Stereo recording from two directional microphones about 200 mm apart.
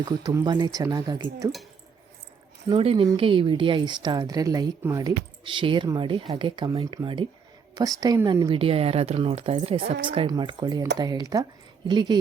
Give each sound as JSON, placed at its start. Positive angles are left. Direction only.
{"t": 0.0, "sound": "a woman's voice", "side_deg": -20}
{"t": 2.6, "sound": "a woman's voice", "side_deg": -25}